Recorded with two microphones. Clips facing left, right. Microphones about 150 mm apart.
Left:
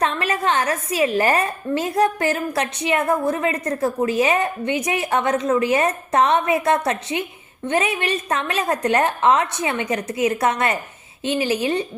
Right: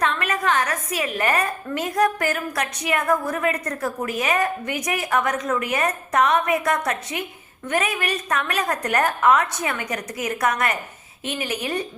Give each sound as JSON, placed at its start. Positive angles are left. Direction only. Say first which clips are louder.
{"t": 0.0, "sound": "a woman's voice", "louder": "left 2 dB", "side_deg": 30}